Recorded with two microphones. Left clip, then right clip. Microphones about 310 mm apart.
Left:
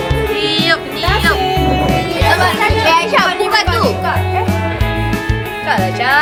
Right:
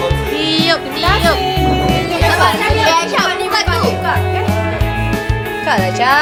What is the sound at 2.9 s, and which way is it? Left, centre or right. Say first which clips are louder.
Music: left 3 dB; left.